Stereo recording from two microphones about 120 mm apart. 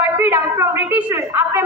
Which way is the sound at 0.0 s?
20° right (ahead or behind).